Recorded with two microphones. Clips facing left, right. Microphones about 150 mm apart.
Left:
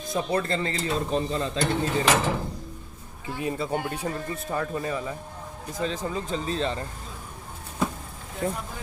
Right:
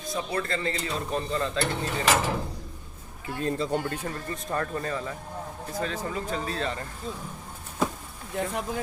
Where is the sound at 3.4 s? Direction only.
10° left (ahead or behind); by 6.8 s 25° left (ahead or behind).